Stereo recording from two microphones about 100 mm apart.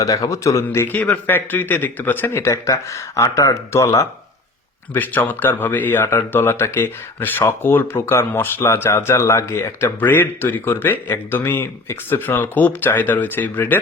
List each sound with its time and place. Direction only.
0.0 s speech: 35° left (ahead or behind)
0.9 s speech: 15° left (ahead or behind)
4.9 s speech: 15° left (ahead or behind)